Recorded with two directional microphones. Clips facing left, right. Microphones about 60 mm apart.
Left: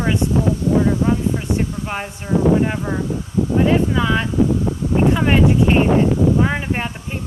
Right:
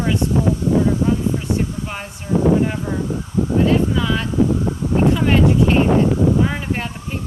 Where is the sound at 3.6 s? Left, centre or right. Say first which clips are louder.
Left 1 dB; centre.